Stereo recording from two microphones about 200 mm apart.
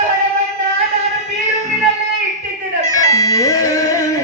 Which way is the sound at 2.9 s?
15° left (ahead or behind).